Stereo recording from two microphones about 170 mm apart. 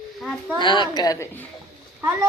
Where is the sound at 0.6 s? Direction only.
25° left (ahead or behind).